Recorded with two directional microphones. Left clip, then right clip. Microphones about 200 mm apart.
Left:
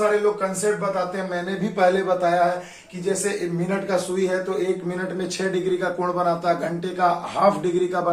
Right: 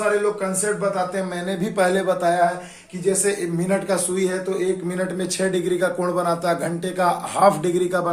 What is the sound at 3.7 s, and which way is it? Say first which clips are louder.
Speech: right 2 dB; 45° right (ahead or behind).